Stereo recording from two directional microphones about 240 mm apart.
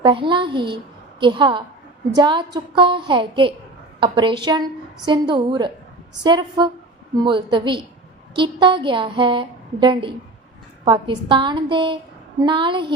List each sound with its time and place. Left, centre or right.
0.0 s a woman's voice: right